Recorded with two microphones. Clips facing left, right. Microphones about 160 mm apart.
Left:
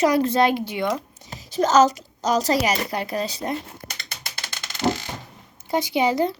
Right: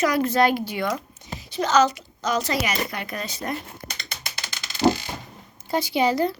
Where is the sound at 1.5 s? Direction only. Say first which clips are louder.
Left 3 dB; 45° left (ahead or behind).